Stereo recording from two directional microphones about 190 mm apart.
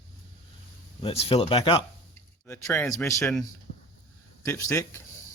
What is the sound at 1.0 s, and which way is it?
Speech, 30° left (ahead or behind).